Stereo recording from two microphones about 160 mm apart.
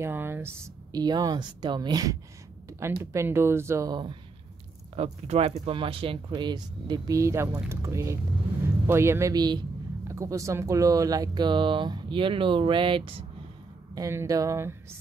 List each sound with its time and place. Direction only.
0.0 s a sound: 15° right (ahead or behind)
1.0 s a man's voice: 25° right (ahead or behind)
4.9 s a man's voice: 45° right (ahead or behind)
13.9 s a man's voice: 20° right (ahead or behind)